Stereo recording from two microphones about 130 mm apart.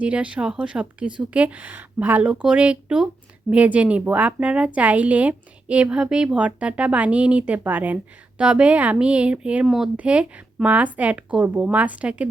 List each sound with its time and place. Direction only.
0.0 s speech: 10° right (ahead or behind)